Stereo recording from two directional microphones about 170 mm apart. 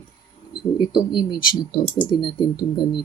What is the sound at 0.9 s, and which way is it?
Speech, 25° left (ahead or behind).